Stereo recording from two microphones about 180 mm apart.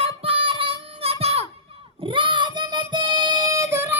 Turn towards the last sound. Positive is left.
turn(degrees=-10)  # may be behind; listen again after turning